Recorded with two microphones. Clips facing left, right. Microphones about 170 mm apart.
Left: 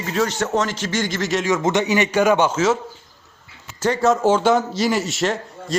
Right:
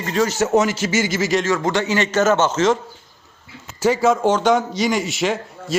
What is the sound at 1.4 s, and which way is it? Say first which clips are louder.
A man's voice: left 1 dB; 20° left (ahead or behind).